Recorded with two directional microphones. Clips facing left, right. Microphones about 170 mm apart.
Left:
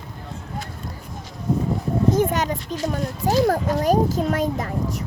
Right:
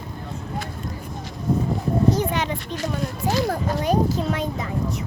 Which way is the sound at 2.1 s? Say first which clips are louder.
Left 3 dB; 45° left (ahead or behind).